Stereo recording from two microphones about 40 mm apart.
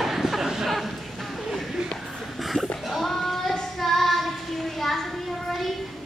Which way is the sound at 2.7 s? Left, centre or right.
Centre.